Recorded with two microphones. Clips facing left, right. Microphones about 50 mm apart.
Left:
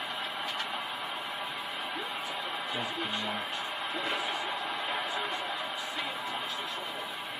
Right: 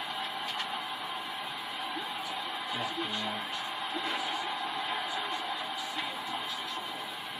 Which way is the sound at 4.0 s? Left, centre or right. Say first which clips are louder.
Left 1 dB; centre.